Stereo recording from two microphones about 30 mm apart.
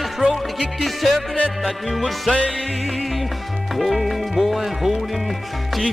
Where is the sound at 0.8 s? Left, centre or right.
Centre.